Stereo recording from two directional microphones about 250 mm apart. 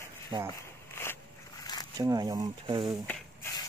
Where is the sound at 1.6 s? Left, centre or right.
Centre.